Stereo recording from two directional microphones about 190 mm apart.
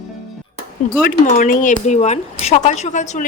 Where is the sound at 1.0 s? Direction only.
45° left (ahead or behind).